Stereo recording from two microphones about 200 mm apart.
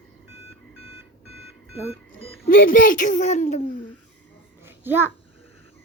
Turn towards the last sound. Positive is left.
turn(degrees=-10)  # may be behind; listen again after turning